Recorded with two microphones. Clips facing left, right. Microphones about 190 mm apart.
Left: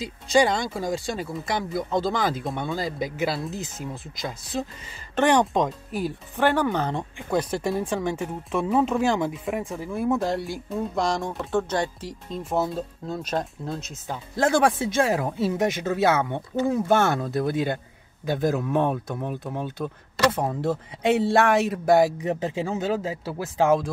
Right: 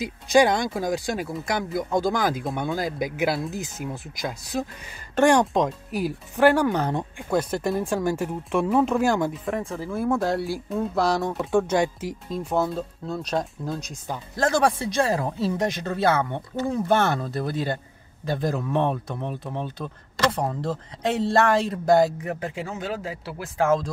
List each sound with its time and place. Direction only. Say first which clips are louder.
0.0 s speech: right 2 dB; 15° right (ahead or behind)
1.3 s speech: right 1 dB; centre (ahead or behind)
1.9 s speech: right 2 dB; 10° right (ahead or behind)
5.3 s speech: right 1 dB; centre (ahead or behind)
12.3 s speech: right 1 dB; centre (ahead or behind)
22.2 s speech: left 4 dB; 25° left (ahead or behind)